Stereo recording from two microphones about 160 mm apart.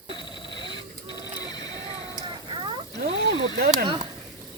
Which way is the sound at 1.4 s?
25° left (ahead or behind).